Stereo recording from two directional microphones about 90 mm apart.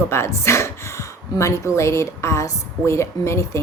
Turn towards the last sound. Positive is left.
turn(degrees=30)  # may be behind; listen again after turning